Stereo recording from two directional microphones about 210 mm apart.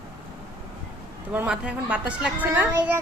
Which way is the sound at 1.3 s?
5° right (ahead or behind).